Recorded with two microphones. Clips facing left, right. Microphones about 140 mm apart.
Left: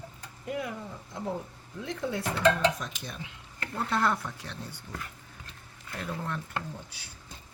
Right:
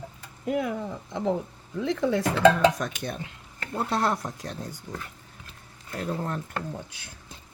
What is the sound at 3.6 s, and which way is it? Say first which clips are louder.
Speech: right 2 dB; 30° right (ahead or behind).